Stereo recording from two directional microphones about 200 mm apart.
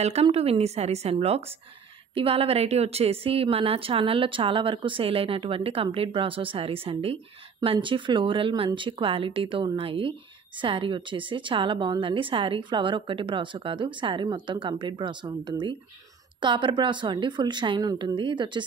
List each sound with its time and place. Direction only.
0.0 s a woman's voice: 30° right (ahead or behind)